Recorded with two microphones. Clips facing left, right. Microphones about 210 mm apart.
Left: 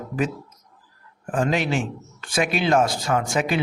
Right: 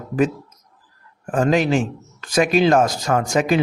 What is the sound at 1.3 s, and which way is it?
A man's voice, 45° right (ahead or behind).